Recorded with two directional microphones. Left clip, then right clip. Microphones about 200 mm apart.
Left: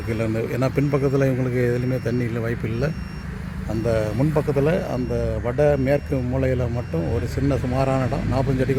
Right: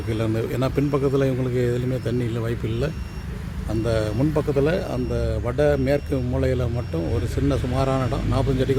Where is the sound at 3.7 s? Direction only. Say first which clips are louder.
Left 1 dB; 10° left (ahead or behind).